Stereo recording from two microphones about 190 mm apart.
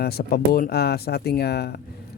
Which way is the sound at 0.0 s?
55° left (ahead or behind).